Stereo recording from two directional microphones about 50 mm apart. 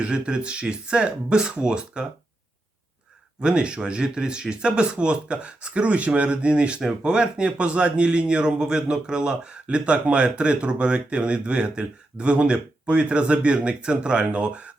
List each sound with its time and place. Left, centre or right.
0.0 s a man's voice: centre
3.4 s a man's voice: centre